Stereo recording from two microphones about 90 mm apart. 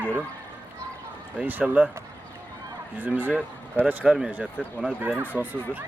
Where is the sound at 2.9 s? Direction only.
20° right (ahead or behind).